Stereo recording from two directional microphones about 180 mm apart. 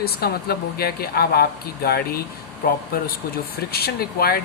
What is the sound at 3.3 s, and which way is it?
Speech, 60° left (ahead or behind).